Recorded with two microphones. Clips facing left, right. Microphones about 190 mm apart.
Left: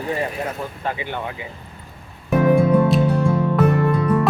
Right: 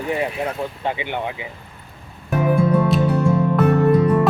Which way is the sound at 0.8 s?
20° right (ahead or behind).